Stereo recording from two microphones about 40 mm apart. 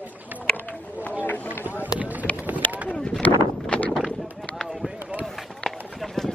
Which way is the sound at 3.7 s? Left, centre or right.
Left.